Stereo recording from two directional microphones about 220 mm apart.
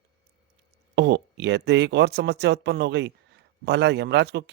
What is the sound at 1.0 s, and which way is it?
Speech, 50° right (ahead or behind).